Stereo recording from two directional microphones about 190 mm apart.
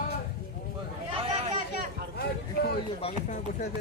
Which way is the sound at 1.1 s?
30° right (ahead or behind).